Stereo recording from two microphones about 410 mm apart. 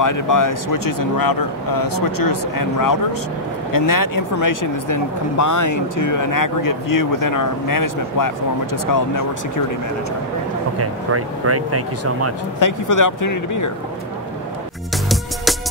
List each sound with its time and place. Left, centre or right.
0.0 s speech: left
10.8 s speech: right
12.5 s speech: left